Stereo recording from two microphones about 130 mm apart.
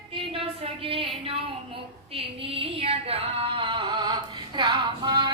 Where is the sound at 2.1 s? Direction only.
45° right (ahead or behind).